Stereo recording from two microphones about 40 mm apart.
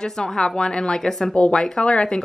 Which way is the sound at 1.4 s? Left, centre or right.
Left.